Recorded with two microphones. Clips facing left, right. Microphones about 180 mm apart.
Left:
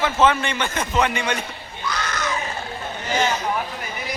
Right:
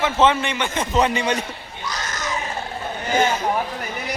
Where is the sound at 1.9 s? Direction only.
40° right (ahead or behind).